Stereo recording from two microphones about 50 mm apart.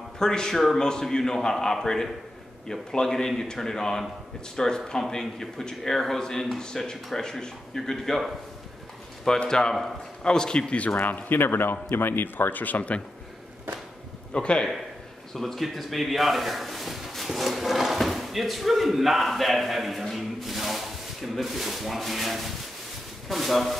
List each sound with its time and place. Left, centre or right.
0.2 s speech: centre
9.4 s speech: centre
11.0 s speech: left
14.3 s a man's voice: centre
15.3 s a man's voice: centre